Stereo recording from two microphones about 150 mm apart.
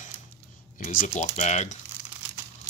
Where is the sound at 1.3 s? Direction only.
50° left (ahead or behind).